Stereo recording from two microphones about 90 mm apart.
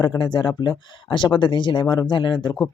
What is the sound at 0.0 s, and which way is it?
Speech, 60° left (ahead or behind).